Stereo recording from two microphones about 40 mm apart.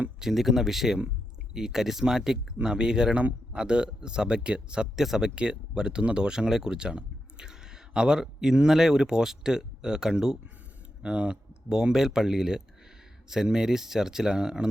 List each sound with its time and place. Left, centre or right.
0.2 s speech: centre; by 4.9 s right
4.9 s speech: centre
5.3 s speech: right